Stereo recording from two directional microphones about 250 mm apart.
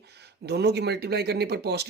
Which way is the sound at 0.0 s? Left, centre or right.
Right.